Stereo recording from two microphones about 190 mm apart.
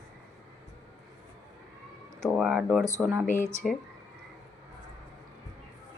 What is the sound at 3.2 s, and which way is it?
Speech, 40° left (ahead or behind).